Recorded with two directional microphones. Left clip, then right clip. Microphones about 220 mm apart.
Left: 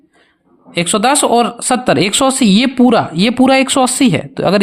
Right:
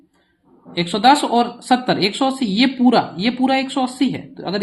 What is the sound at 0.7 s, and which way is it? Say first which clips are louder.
Speech: left 1 dB; 45° left (ahead or behind).